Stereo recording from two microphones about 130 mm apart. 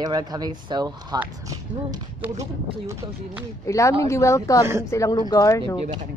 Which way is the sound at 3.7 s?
25° left (ahead or behind).